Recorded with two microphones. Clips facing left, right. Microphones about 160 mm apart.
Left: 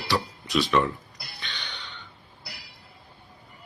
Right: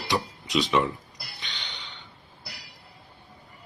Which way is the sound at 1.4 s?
15° right (ahead or behind).